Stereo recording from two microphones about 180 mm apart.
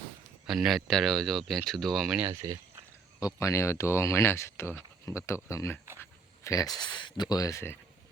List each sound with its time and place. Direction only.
0.4 s speech: centre (ahead or behind)
2.2 s speech: 15° right (ahead or behind)
3.2 s speech: 20° left (ahead or behind)